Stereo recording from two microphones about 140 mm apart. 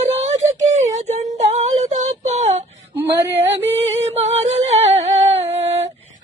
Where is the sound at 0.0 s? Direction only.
50° right (ahead or behind).